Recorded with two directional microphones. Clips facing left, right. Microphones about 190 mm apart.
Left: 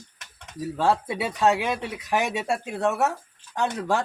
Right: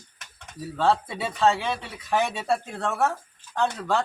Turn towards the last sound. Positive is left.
turn(degrees=15)  # may be behind; listen again after turning